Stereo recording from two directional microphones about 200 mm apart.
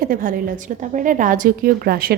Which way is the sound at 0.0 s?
45° right (ahead or behind).